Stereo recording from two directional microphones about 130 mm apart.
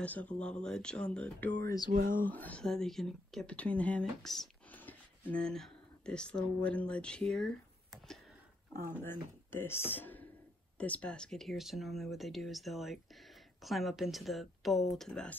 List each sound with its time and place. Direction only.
0.0 s speech: 10° left (ahead or behind)
1.9 s speech: 90° right
2.2 s speech: 10° left (ahead or behind)
9.0 s speech: 15° left (ahead or behind)